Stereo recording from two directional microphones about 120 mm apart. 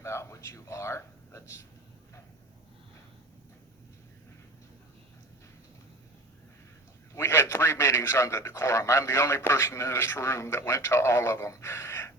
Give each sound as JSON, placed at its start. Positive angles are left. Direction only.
{"t": 0.0, "sound": "speech", "side_deg": 25}
{"t": 7.1, "sound": "a man's voice", "side_deg": 20}